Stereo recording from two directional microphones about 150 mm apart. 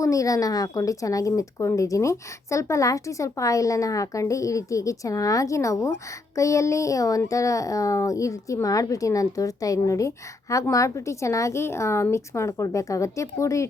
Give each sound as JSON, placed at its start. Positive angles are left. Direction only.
{"t": 0.0, "sound": "speech", "side_deg": 20}